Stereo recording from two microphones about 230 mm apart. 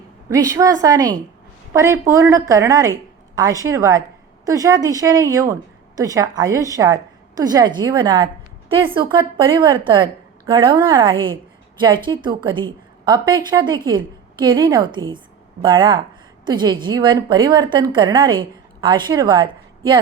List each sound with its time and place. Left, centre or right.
0.3 s a woman's voice: centre